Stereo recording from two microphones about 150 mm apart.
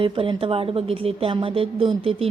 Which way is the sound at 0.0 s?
35° right (ahead or behind).